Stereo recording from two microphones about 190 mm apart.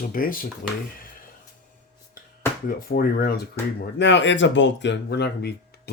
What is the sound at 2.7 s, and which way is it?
Speech, 50° left (ahead or behind).